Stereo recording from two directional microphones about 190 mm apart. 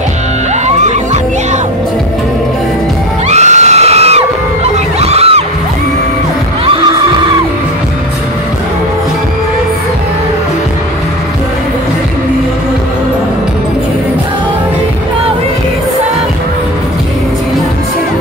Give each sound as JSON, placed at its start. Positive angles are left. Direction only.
{"t": 0.7, "sound": "music", "side_deg": -35}
{"t": 3.3, "sound": "a sound", "side_deg": -35}
{"t": 5.0, "sound": "music", "side_deg": -30}
{"t": 6.6, "sound": "music", "side_deg": -30}